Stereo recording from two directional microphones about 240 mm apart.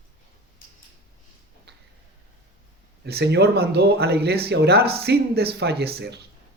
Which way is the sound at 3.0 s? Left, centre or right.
Right.